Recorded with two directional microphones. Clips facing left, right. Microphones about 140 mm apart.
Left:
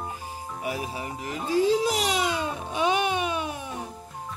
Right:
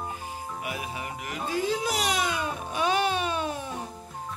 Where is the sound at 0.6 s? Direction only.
35° left (ahead or behind).